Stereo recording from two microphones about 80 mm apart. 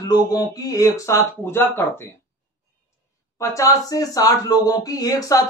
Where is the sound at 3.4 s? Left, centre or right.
Left.